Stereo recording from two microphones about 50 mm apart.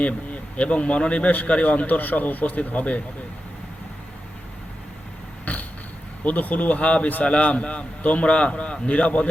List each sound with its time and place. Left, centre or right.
0.5 s a man's voice: left
5.5 s a sound: left
6.2 s a man's voice: left